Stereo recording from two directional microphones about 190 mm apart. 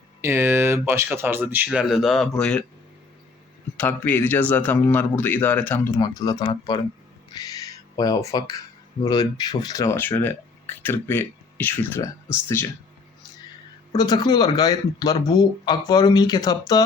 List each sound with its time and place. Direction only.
0.2 s speech: 10° right (ahead or behind); by 2.6 s 5° left (ahead or behind)
3.8 s speech: 10° left (ahead or behind)
6.0 s speech: 20° left (ahead or behind)
13.9 s speech: 20° left (ahead or behind)